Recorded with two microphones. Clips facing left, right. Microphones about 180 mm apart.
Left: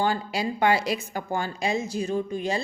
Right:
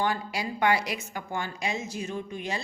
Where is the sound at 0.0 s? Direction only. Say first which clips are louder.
Left 3 dB; 30° left (ahead or behind).